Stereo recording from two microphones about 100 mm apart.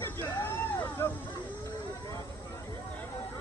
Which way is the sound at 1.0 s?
25° left (ahead or behind).